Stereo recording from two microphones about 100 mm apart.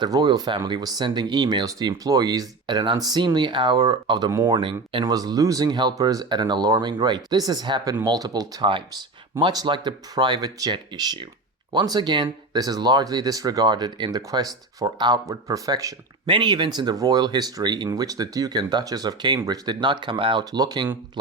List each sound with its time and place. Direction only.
0.0 s speech: 45° right (ahead or behind)
5.0 s speech: 40° right (ahead or behind)
6.2 s speech: 50° right (ahead or behind)
16.2 s speech: 55° right (ahead or behind)
20.4 s speech: 40° right (ahead or behind)